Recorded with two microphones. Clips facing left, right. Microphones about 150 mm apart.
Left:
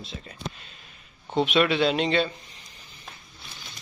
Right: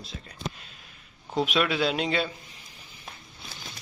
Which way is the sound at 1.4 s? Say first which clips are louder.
Left 4 dB; centre (ahead or behind).